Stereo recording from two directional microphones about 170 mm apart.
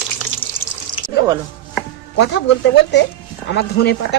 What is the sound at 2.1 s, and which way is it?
Speech, 90° left.